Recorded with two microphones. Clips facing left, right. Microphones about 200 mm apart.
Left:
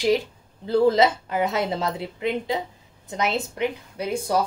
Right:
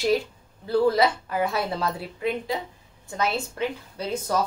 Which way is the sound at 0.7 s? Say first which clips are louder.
Left 2 dB; 20° left (ahead or behind).